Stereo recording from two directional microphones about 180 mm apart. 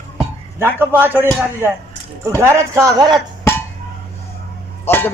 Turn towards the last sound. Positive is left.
turn(degrees=10)  # may be behind; listen again after turning